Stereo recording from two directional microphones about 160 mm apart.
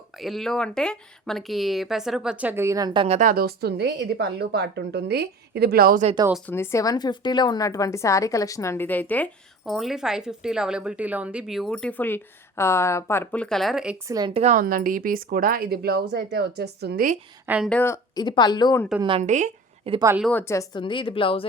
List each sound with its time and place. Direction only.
0.2 s a woman's voice: centre (ahead or behind); by 3.2 s 30° right (ahead or behind)
3.2 s a woman's voice: 60° right (ahead or behind)
6.4 s a woman's voice: 15° left (ahead or behind)
9.6 s a woman's voice: centre (ahead or behind)
14.1 s a woman's voice: 25° right (ahead or behind)
14.3 s speech: 50° right (ahead or behind); by 17.1 s 80° right
17.4 s speech: 10° right (ahead or behind)
17.7 s a woman's voice: 15° left (ahead or behind)
19.2 s speech: 50° right (ahead or behind)
19.9 s a woman's voice: 40° right (ahead or behind)
20.3 s a woman's voice: 15° left (ahead or behind)
20.7 s a woman's voice: 30° left (ahead or behind)